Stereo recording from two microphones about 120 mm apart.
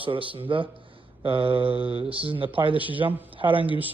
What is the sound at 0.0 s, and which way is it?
A man's voice, 45° right (ahead or behind).